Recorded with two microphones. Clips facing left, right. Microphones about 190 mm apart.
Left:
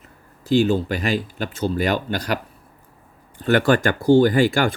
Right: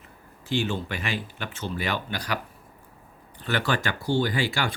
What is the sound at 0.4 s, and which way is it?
Speech, 40° left (ahead or behind).